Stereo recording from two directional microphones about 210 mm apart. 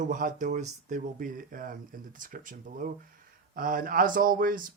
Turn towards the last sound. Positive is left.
turn(degrees=-40)  # may be behind; listen again after turning